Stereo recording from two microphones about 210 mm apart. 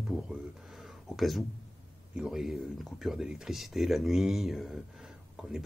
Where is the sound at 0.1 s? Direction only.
Centre (ahead or behind).